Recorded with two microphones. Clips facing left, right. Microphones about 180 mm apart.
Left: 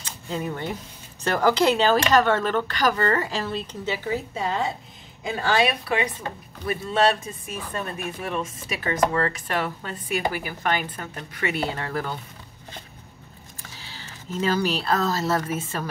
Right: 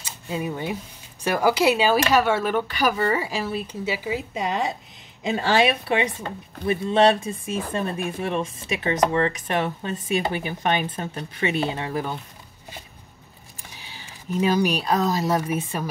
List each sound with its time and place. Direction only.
0.0 s speech: 10° right (ahead or behind)
13.7 s speech: 15° right (ahead or behind)